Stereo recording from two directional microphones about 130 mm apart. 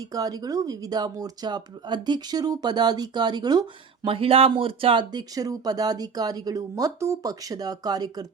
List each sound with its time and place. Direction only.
0.1 s speech: 30° right (ahead or behind)